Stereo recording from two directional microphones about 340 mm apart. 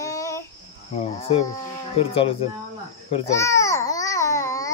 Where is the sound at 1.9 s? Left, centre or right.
Centre.